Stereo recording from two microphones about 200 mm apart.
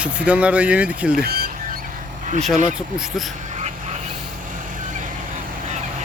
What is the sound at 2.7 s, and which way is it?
Speech, centre (ahead or behind).